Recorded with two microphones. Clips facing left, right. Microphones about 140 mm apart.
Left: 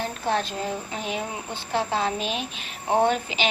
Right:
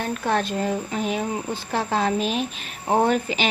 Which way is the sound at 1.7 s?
45° right (ahead or behind).